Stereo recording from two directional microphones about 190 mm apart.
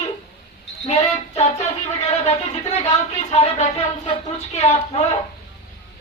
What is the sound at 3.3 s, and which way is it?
Speech, 35° left (ahead or behind).